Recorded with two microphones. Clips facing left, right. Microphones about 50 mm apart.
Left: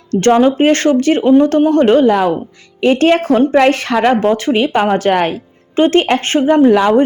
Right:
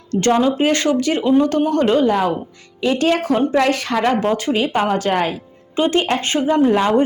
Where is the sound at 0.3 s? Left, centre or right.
Left.